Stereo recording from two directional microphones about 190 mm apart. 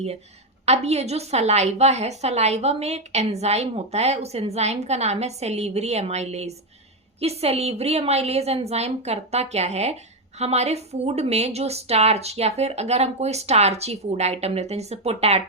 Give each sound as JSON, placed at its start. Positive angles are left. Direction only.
{"t": 0.6, "sound": "a woman's voice", "side_deg": -35}